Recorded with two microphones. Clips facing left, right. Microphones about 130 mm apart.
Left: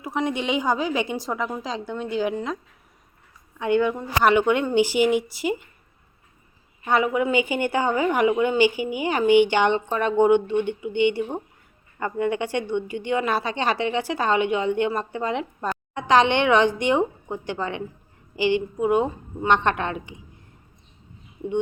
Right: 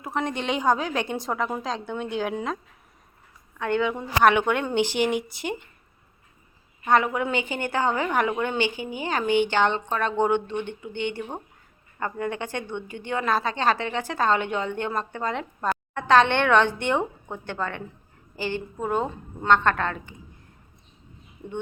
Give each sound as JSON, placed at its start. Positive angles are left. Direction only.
{"t": 0.0, "sound": "a woman's voice", "side_deg": 0}
{"t": 3.6, "sound": "a woman's voice", "side_deg": 10}
{"t": 6.9, "sound": "a woman's voice", "side_deg": 5}
{"t": 12.2, "sound": "a woman's voice", "side_deg": -45}
{"t": 13.1, "sound": "a woman's voice", "side_deg": 10}
{"t": 13.7, "sound": "a woman's voice", "side_deg": -45}
{"t": 14.1, "sound": "a woman's voice", "side_deg": 10}